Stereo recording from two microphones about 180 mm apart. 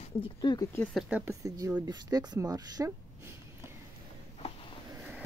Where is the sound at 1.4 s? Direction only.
20° right (ahead or behind).